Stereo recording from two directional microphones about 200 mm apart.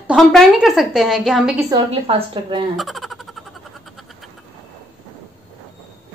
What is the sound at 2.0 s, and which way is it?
Speech, 25° right (ahead or behind).